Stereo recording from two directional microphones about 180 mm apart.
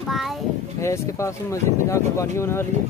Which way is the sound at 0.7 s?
15° left (ahead or behind).